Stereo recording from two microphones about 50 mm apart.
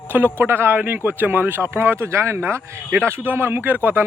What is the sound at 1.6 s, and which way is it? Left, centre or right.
Speech, right.